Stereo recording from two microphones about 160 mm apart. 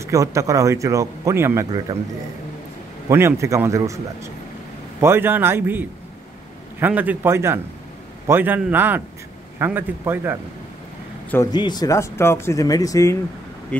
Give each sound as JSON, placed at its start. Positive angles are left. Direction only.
{"t": 0.0, "sound": "speech", "side_deg": -20}
{"t": 3.1, "sound": "a man's voice", "side_deg": -15}
{"t": 11.5, "sound": "speech", "side_deg": 25}